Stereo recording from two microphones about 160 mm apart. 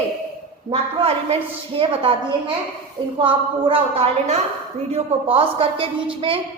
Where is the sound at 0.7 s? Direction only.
35° right (ahead or behind).